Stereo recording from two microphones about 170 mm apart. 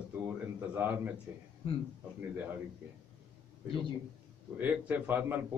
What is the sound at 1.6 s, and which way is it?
Speech, 35° left (ahead or behind).